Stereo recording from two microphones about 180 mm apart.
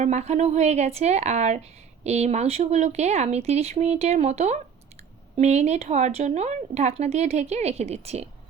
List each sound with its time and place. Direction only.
0.0 s speech: 40° right (ahead or behind)